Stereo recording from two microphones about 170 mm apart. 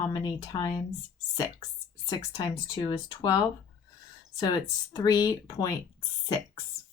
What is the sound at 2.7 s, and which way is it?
Speech, 25° left (ahead or behind).